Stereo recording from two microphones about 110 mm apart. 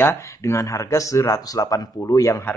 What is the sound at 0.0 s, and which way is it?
Speech, 25° left (ahead or behind).